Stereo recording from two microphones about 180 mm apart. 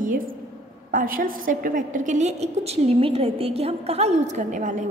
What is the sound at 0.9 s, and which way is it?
A woman's voice, 50° right (ahead or behind).